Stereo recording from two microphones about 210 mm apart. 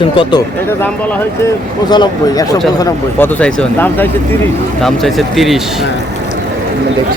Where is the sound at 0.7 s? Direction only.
10° left (ahead or behind).